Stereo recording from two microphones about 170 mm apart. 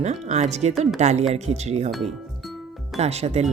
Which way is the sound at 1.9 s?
Centre (ahead or behind).